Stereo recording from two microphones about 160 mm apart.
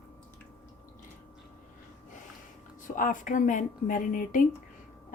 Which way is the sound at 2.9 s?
60° left (ahead or behind).